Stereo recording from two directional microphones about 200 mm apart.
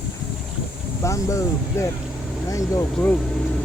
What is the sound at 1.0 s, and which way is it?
Speech, 15° left (ahead or behind).